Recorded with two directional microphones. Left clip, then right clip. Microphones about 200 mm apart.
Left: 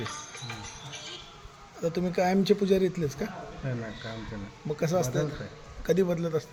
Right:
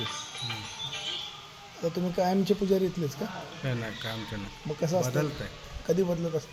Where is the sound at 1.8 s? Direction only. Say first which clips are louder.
Left 1 dB; 25° left (ahead or behind).